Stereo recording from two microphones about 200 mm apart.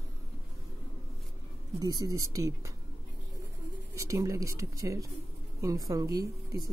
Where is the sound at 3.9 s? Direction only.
15° right (ahead or behind).